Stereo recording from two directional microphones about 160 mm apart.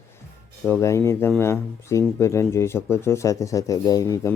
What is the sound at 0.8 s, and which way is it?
Speech, 20° left (ahead or behind).